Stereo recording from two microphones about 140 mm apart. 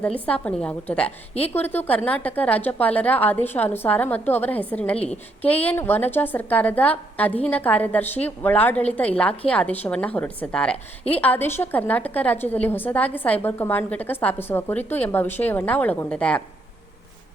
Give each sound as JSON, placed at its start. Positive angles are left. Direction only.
{"t": 0.0, "sound": "a woman's voice", "side_deg": 10}
{"t": 1.3, "sound": "speech", "side_deg": 45}
{"t": 1.5, "sound": "a woman's voice", "side_deg": 15}